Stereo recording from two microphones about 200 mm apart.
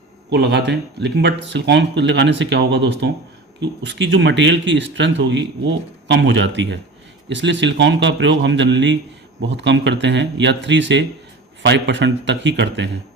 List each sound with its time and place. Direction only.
0.3 s speech: 55° right (ahead or behind)